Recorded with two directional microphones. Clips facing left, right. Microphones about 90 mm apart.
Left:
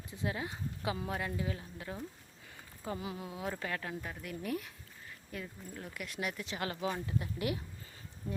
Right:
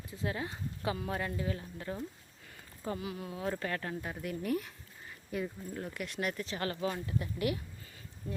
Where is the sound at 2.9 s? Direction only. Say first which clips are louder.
Right 1 dB; 25° left (ahead or behind).